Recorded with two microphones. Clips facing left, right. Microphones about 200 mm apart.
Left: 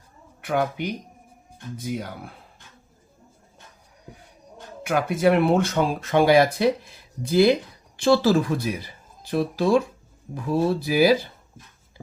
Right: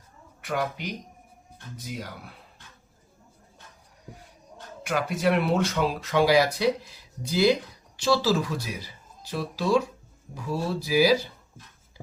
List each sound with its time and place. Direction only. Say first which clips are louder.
0.4 s speech: left 5 dB; 55° left (ahead or behind)
4.9 s speech: left 5 dB; 55° left (ahead or behind)